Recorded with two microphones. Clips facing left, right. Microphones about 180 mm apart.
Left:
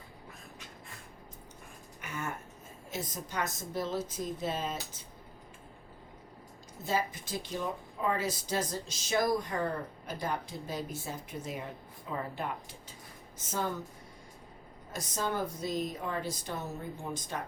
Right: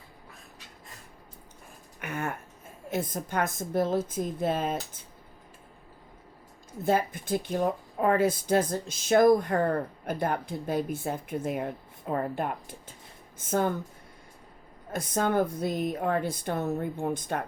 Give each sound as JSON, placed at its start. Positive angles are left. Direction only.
{"t": 2.0, "sound": "a sound", "side_deg": -60}
{"t": 2.9, "sound": "speech", "side_deg": -55}
{"t": 6.8, "sound": "speech", "side_deg": -55}
{"t": 14.9, "sound": "speech", "side_deg": -55}